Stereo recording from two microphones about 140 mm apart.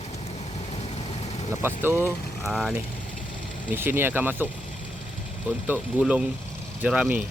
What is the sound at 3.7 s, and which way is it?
Speech, 15° right (ahead or behind).